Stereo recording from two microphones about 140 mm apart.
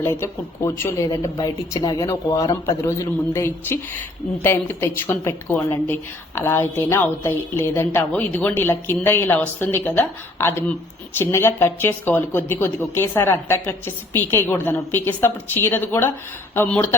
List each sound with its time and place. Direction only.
0.0 s a man's voice: 20° left (ahead or behind)